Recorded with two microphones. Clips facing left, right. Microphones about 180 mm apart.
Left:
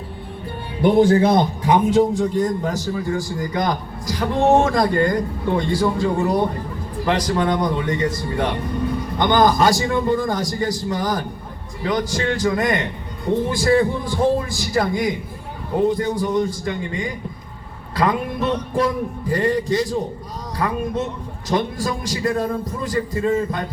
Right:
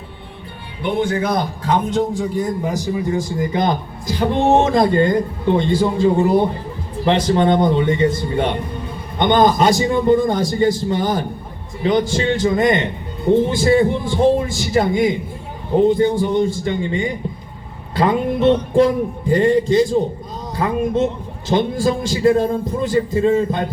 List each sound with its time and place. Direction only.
0.8 s speech: 40° left (ahead or behind)
1.9 s a man's voice: centre (ahead or behind); by 23.6 s 25° right (ahead or behind)